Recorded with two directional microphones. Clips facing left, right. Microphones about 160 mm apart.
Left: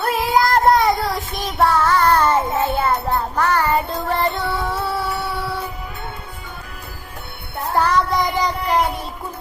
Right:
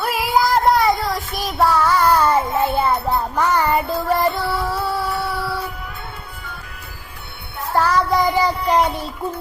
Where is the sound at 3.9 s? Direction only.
Centre (ahead or behind).